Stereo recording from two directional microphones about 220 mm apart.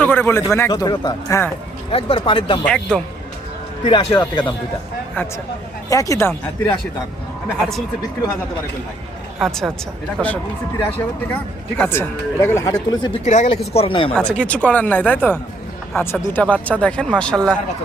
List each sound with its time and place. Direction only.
0.0 s speech: 10° left (ahead or behind)
2.6 s speech: 5° left (ahead or behind)
3.8 s speech: 20° left (ahead or behind)
5.9 s speech: 15° left (ahead or behind)
9.4 s speech: centre (ahead or behind)
11.8 s speech: 10° left (ahead or behind)
13.2 s speech: 30° left (ahead or behind)
14.1 s speech: 5° left (ahead or behind)